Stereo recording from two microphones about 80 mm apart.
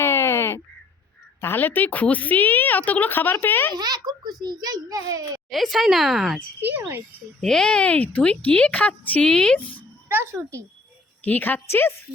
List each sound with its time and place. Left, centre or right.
0.0 s a sound: left
1.4 s a woman's voice: left
3.8 s a child's voice: right
5.5 s a woman's voice: centre
6.7 s speech: right
7.4 s a woman's voice: centre
11.3 s a woman's voice: left